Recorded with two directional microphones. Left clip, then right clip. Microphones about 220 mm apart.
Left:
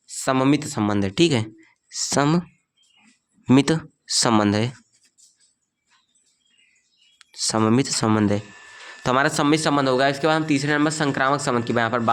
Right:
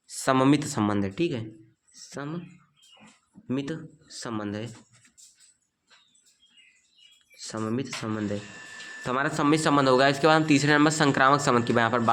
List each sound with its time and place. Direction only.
0.1 s speech: 15° left (ahead or behind)
1.1 s speech: 45° left (ahead or behind)
3.4 s speech: 50° left (ahead or behind)
7.2 s speech: 45° left (ahead or behind)
9.0 s speech: 35° left (ahead or behind); by 12.0 s 10° left (ahead or behind)